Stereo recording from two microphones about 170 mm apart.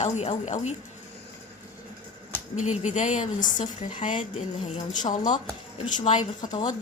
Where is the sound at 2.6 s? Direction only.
45° left (ahead or behind).